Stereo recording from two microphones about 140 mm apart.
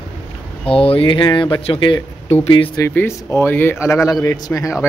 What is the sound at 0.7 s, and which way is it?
Speech, 40° left (ahead or behind).